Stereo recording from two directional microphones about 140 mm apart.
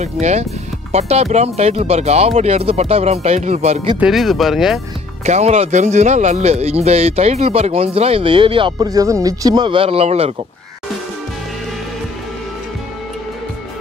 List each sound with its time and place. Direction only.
0.0 s speech: 55° right (ahead or behind)
4.0 s speech: centre (ahead or behind)
5.2 s speech: 55° right (ahead or behind)